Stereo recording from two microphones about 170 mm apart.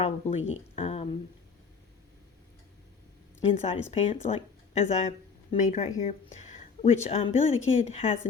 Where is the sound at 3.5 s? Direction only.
40° left (ahead or behind).